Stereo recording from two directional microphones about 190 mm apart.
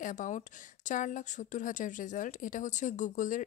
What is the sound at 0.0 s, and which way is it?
A woman's voice, 40° left (ahead or behind).